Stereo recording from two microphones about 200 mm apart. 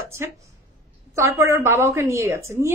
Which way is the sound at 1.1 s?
15° right (ahead or behind).